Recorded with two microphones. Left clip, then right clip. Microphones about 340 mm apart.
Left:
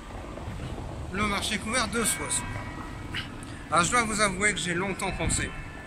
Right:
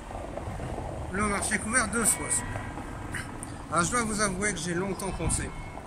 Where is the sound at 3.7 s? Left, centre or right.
Centre.